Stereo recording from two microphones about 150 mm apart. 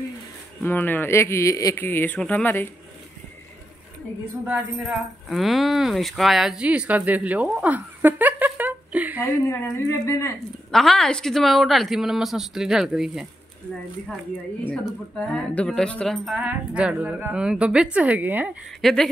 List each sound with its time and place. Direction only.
0.6 s speech: 15° left (ahead or behind)
5.3 s speech: centre (ahead or behind)
9.2 s speech: 20° left (ahead or behind)
10.7 s a woman's voice: 5° left (ahead or behind)
15.1 s a woman's voice: 10° left (ahead or behind); by 18.6 s 10° right (ahead or behind)
18.8 s a woman's voice: centre (ahead or behind)